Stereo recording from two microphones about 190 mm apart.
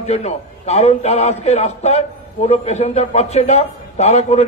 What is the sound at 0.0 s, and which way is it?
A man's voice, 35° left (ahead or behind).